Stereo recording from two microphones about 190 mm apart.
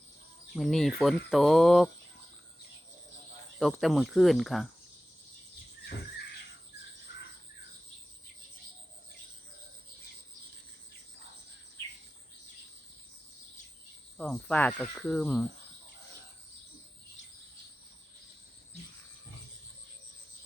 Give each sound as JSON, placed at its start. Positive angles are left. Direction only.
{"t": 0.5, "sound": "speech", "side_deg": 0}
{"t": 3.6, "sound": "speech", "side_deg": 0}
{"t": 7.1, "sound": "cricket", "side_deg": 65}
{"t": 14.2, "sound": "speech", "side_deg": 5}